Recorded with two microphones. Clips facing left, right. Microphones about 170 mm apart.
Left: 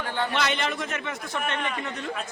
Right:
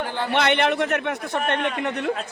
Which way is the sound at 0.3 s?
65° right (ahead or behind).